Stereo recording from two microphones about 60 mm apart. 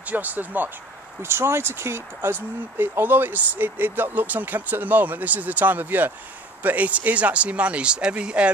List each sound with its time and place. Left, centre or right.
0.1 s speech: right
1.2 s speech: right
2.8 s speech: right; by 8.5 s centre